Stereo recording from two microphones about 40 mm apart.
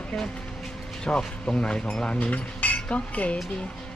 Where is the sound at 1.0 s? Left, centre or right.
Left.